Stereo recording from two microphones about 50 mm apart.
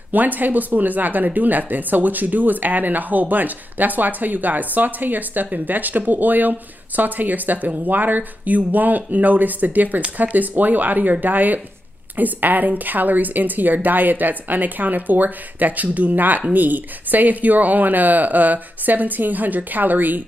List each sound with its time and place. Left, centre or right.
0.1 s speech: right